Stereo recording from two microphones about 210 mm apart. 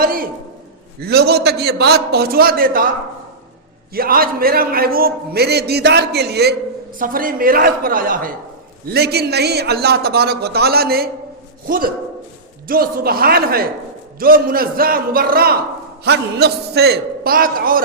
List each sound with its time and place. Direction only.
0.0 s a sound: 45° right (ahead or behind)
0.9 s a man's voice: 50° right (ahead or behind)
3.9 s a man's voice: 45° right (ahead or behind)
12.6 s a man's voice: 45° right (ahead or behind)